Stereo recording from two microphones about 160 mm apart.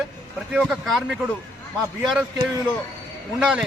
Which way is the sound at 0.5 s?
Centre (ahead or behind).